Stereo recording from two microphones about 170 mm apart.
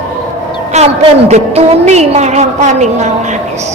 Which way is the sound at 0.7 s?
40° right (ahead or behind).